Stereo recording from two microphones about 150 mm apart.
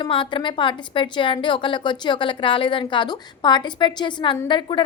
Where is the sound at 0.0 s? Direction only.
35° left (ahead or behind).